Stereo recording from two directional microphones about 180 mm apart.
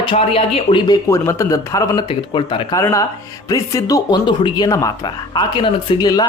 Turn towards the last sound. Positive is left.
turn(degrees=20)  # may be behind; listen again after turning